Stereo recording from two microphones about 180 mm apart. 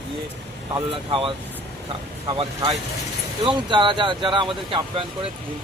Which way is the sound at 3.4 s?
25° right (ahead or behind).